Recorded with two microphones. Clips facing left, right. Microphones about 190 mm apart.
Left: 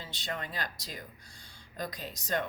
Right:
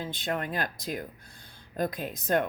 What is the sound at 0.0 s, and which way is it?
Speech, 55° right (ahead or behind).